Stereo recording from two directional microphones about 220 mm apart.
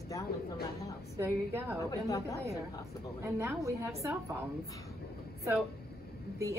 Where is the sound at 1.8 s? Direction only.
15° left (ahead or behind).